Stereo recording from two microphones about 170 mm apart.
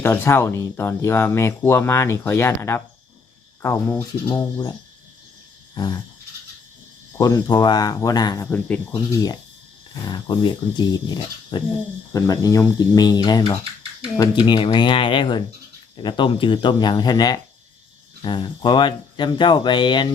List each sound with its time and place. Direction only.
0.0 s speech: 15° left (ahead or behind)
4.4 s speech: 25° left (ahead or behind)
7.2 s speech: 20° left (ahead or behind)
8.4 s speech: 10° left (ahead or behind)
8.9 s speech: 25° left (ahead or behind)